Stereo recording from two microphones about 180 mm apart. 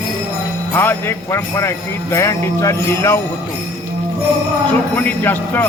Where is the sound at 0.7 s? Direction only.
15° left (ahead or behind).